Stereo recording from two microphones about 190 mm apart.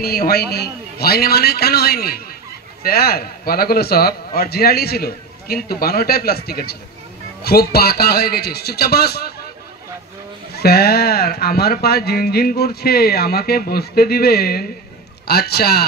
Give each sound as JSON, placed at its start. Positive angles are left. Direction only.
{"t": 0.0, "sound": "a man's voice", "side_deg": 55}
{"t": 10.5, "sound": "speech", "side_deg": 55}